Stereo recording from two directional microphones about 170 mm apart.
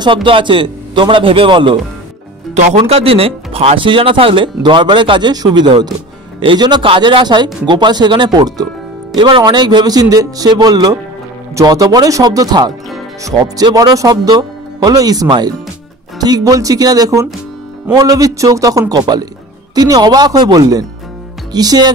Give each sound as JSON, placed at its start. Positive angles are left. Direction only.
{"t": 0.0, "sound": "speech", "side_deg": -30}